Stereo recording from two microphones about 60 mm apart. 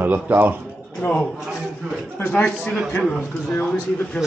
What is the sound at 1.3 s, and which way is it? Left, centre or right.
Speech, centre.